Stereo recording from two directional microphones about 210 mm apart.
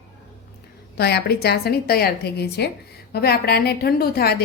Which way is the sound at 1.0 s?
50° left (ahead or behind).